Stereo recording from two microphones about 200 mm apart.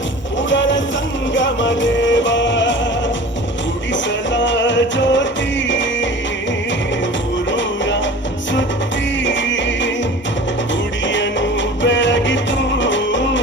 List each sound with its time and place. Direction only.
0.5 s a sound: 65° left (ahead or behind)
1.3 s music: 65° left (ahead or behind)
3.9 s music: 65° left (ahead or behind)
7.5 s music: 65° left (ahead or behind)
9.2 s music: 65° left (ahead or behind)
11.1 s music: 65° left (ahead or behind)